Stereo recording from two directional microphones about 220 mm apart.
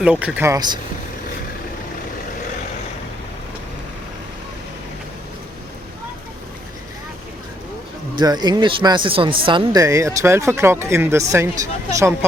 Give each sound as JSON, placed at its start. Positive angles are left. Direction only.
{"t": 0.0, "sound": "speech", "side_deg": -5}
{"t": 8.2, "sound": "speech", "side_deg": -20}